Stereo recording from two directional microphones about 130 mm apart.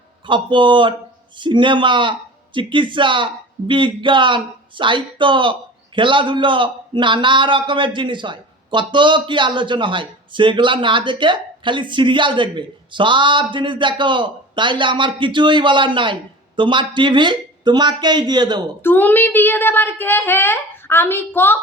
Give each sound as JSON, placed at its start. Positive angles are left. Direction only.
{"t": 0.3, "sound": "a man's voice", "side_deg": -40}
{"t": 18.8, "sound": "a child's voice", "side_deg": 15}